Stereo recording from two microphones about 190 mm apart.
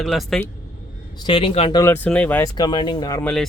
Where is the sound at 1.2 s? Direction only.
30° left (ahead or behind).